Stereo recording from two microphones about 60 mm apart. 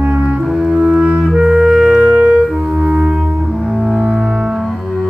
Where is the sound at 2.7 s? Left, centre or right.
Right.